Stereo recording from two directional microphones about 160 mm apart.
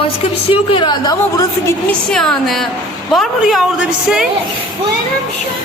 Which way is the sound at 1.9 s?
5° left (ahead or behind).